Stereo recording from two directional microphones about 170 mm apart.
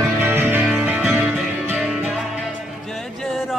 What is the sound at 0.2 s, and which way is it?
Music, 15° right (ahead or behind).